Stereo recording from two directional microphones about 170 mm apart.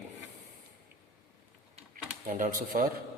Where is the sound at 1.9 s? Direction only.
55° right (ahead or behind).